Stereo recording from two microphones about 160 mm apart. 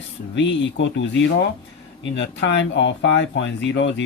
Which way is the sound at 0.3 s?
90° left.